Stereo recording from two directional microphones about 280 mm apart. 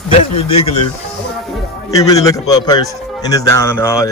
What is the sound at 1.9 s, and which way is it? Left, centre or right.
Speech, centre.